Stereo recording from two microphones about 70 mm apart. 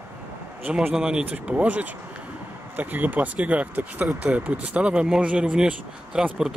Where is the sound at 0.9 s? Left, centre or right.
Centre.